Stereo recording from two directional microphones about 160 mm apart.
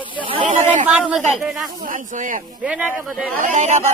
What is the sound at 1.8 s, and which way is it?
Speech, 55° right (ahead or behind).